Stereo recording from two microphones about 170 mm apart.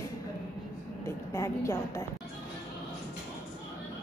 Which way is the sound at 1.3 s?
20° left (ahead or behind).